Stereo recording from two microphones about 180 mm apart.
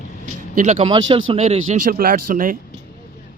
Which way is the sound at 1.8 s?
55° right (ahead or behind).